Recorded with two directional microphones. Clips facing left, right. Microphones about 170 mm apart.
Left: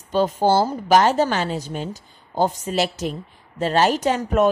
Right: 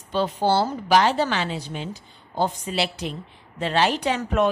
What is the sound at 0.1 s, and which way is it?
A woman's voice, 45° left (ahead or behind).